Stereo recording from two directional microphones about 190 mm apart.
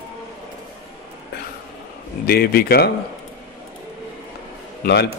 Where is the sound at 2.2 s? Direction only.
55° left (ahead or behind).